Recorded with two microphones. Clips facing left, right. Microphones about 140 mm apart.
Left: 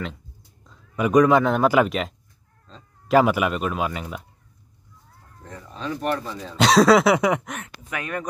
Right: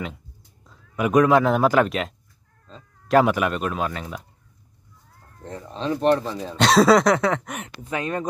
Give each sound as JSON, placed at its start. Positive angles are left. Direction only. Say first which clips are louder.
{"t": 0.7, "sound": "a man's voice", "louder": "even", "side_deg": 0}
{"t": 1.7, "sound": "a sound", "louder": "even", "side_deg": 0}
{"t": 2.7, "sound": "speech", "louder": "even", "side_deg": 0}
{"t": 5.4, "sound": "speech", "louder": "right 4 dB", "side_deg": -30}
{"t": 6.5, "sound": "a sound", "louder": "even", "side_deg": 0}
{"t": 7.6, "sound": "speech", "louder": "right 5 dB", "side_deg": -25}